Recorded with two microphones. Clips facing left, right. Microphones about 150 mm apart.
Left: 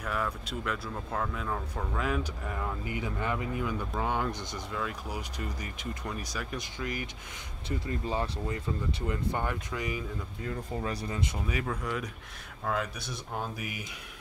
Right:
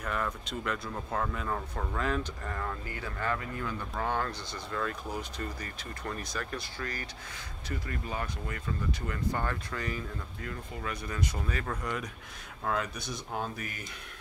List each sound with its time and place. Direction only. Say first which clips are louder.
0.0 s speech: left 1 dB; 5° left (ahead or behind)
10.4 s speech: left 5 dB; 30° left (ahead or behind)
11.3 s speech: left 2 dB; 10° left (ahead or behind)